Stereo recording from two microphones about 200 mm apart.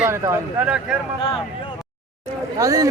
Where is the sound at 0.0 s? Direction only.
15° right (ahead or behind).